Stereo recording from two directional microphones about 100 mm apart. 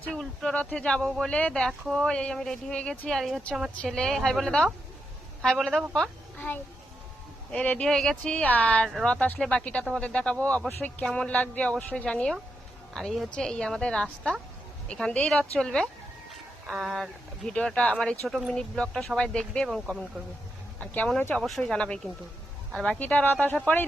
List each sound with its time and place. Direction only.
0.0 s speech: 5° left (ahead or behind)
1.0 s speech: centre (ahead or behind)
1.3 s speech: 10° left (ahead or behind)
3.2 s a woman's voice: centre (ahead or behind)
7.5 s speech: 10° left (ahead or behind)
18.3 s speech: centre (ahead or behind); by 21.4 s 20° left (ahead or behind)
21.4 s speech: 5° left (ahead or behind)